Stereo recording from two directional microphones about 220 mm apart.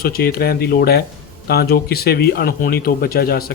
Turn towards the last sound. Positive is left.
turn(degrees=45)  # may be behind; listen again after turning